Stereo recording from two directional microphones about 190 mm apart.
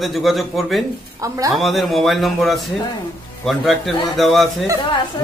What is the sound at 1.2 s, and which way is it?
Speech, 15° right (ahead or behind).